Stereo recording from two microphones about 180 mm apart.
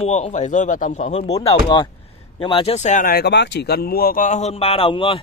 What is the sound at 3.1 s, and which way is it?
Speech, 70° left (ahead or behind).